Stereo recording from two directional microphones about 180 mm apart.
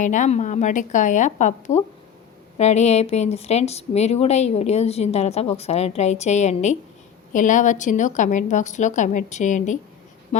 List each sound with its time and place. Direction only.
0.0 s a woman's voice: 45° left (ahead or behind)